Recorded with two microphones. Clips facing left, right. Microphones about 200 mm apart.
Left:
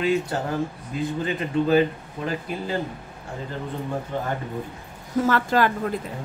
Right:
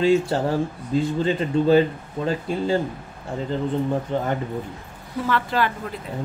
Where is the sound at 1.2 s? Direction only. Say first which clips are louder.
Right 1 dB; 30° right (ahead or behind).